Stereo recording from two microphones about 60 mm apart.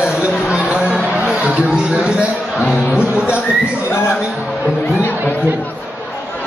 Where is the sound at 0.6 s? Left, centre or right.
Right.